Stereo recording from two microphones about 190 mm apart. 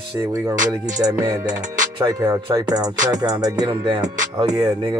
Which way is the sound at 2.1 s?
15° right (ahead or behind).